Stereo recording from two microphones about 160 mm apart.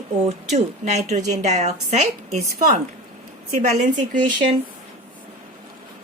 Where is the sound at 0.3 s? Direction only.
45° right (ahead or behind).